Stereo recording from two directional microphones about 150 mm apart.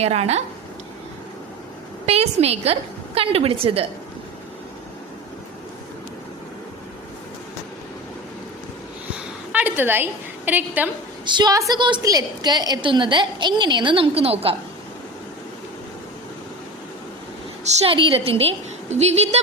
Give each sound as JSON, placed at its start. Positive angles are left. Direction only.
{"t": 0.0, "sound": "a woman's voice", "side_deg": -45}
{"t": 2.0, "sound": "a woman's voice", "side_deg": -45}
{"t": 9.1, "sound": "a sound", "side_deg": -10}
{"t": 11.3, "sound": "a woman's voice", "side_deg": -30}
{"t": 17.7, "sound": "a woman's voice", "side_deg": -35}